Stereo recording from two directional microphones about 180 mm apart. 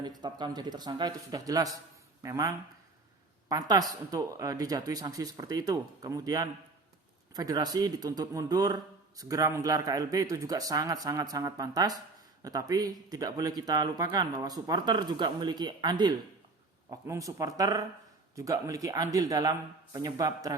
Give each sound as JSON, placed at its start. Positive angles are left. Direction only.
{"t": 0.0, "sound": "speech", "side_deg": -25}
{"t": 3.5, "sound": "speech", "side_deg": -20}